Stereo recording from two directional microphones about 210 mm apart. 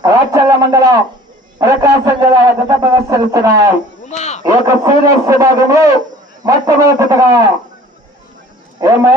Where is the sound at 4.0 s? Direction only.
30° left (ahead or behind).